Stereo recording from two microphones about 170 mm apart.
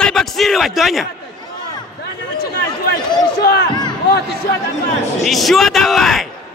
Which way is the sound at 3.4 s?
70° left (ahead or behind).